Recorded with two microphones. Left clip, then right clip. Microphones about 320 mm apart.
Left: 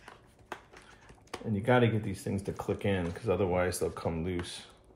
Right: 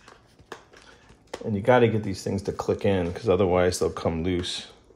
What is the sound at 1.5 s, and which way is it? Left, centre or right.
Speech, right.